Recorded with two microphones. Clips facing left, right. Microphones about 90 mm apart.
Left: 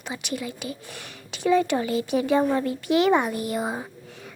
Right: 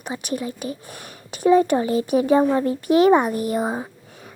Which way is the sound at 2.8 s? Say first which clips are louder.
Right 5 dB; 40° right (ahead or behind).